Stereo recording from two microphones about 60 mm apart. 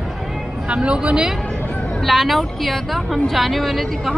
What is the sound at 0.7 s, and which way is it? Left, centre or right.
Speech, centre.